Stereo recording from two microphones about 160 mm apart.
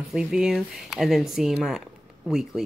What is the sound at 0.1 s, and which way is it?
A woman's voice, 5° right (ahead or behind).